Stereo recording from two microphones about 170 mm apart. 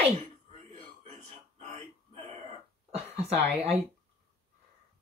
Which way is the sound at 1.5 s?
45° right (ahead or behind).